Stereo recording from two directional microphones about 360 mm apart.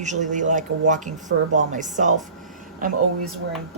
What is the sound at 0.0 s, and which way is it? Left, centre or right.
Speech, centre.